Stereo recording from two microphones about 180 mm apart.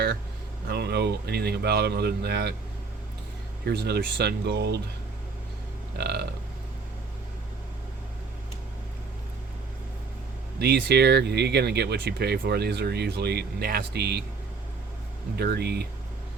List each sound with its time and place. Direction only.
0.7 s speech: 65° right (ahead or behind)
3.7 s speech: 65° right (ahead or behind)
6.0 s speech: 65° right (ahead or behind)
10.6 s speech: 65° right (ahead or behind)
15.4 s speech: 65° right (ahead or behind)